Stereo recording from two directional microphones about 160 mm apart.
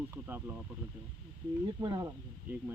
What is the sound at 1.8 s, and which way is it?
Speech, 10° right (ahead or behind).